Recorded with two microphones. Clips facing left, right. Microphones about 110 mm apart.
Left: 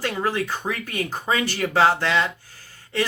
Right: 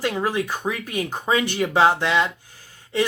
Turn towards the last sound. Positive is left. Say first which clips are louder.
# right 2 dB
turn(degrees=-15)  # may be behind; listen again after turning